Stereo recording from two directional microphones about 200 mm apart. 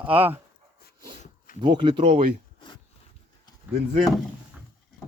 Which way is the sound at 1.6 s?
25° right (ahead or behind).